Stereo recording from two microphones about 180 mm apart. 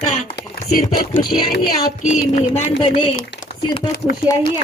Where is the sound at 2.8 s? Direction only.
30° left (ahead or behind).